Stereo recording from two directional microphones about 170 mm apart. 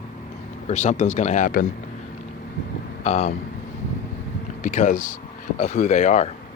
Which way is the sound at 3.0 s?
40° left (ahead or behind).